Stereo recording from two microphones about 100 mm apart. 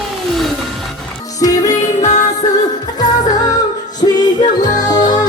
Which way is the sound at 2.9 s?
40° left (ahead or behind).